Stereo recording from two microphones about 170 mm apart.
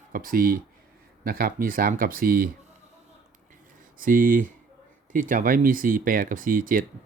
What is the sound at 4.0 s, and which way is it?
Speech, 55° right (ahead or behind).